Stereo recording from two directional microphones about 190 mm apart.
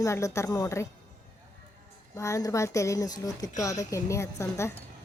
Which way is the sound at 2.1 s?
15° left (ahead or behind).